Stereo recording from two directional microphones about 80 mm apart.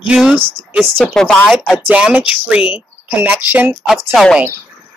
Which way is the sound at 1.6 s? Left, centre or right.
Centre.